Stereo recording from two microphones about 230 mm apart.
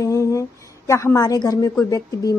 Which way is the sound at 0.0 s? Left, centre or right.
Centre.